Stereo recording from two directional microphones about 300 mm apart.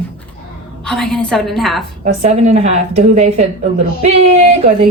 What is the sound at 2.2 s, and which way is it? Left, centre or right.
A woman's voice, right.